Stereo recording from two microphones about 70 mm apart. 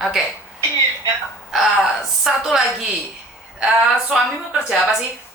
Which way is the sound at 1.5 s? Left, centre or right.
Centre.